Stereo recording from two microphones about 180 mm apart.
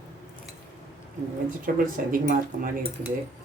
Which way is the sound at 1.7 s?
55° right (ahead or behind).